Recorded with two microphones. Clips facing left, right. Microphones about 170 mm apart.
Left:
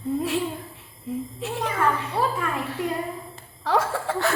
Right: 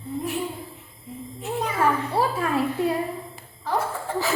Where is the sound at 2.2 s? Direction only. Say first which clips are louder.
Right 1 dB; 30° right (ahead or behind).